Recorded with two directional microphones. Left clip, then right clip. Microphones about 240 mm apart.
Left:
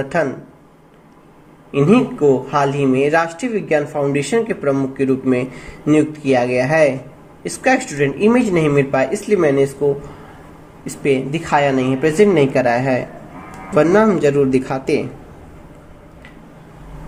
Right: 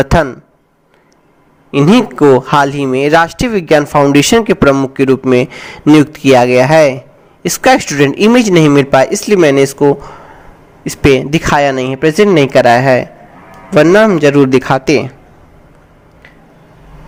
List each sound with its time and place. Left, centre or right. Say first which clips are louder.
0.0 s speech: right 8 dB; right
1.7 s speech: right 5 dB; right
10.8 s speech: right 8 dB; right